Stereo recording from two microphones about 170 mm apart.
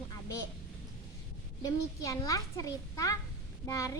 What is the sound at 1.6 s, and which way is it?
A child's voice, 20° left (ahead or behind).